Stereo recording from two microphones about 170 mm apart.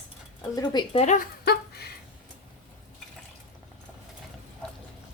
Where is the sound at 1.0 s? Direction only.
45° left (ahead or behind).